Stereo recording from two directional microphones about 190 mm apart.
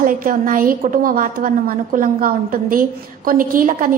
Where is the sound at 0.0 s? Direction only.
45° right (ahead or behind).